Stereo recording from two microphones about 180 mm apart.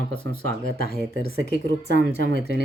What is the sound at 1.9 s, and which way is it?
Speech, 55° left (ahead or behind).